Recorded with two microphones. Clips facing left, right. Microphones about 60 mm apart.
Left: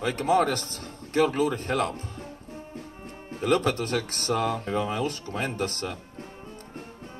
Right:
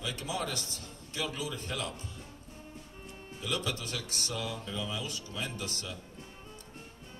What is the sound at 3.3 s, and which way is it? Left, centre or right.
Speech, left.